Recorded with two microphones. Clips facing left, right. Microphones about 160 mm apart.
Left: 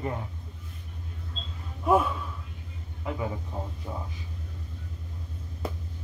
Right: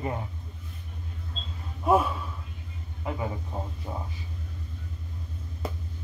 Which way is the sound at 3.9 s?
15° right (ahead or behind).